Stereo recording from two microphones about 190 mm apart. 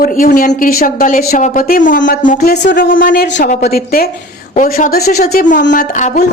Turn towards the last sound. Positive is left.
turn(degrees=40)  # may be behind; listen again after turning